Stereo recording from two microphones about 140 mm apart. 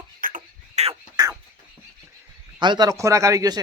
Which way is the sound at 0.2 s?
80° right.